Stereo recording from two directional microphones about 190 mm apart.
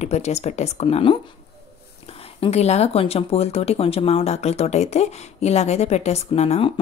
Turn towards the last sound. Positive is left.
turn(degrees=35)  # may be behind; listen again after turning